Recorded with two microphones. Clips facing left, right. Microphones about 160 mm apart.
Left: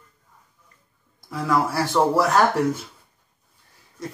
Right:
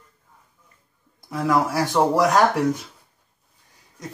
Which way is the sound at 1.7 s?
15° right (ahead or behind).